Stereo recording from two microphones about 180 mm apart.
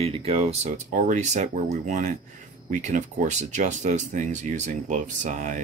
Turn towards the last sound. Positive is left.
turn(degrees=-45)  # may be behind; listen again after turning